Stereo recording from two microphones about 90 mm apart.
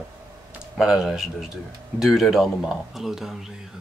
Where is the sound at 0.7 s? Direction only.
5° right (ahead or behind).